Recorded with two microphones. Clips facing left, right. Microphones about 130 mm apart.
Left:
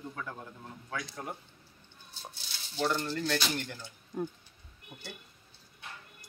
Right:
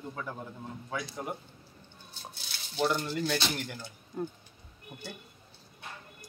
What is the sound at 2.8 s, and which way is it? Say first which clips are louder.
Speech: right 2 dB; 10° right (ahead or behind).